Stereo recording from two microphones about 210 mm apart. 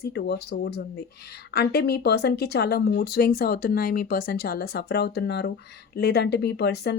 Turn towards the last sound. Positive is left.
turn(degrees=50)  # may be behind; listen again after turning